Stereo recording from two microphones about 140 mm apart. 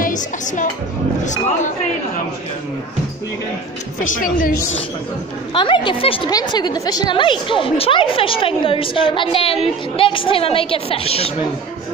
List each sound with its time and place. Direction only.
0.0 s music: 65° left (ahead or behind)
4.0 s a woman's voice: 75° left (ahead or behind)
5.5 s a woman's voice: 35° left (ahead or behind)